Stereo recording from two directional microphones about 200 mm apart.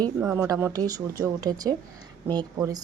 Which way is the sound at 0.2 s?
15° right (ahead or behind).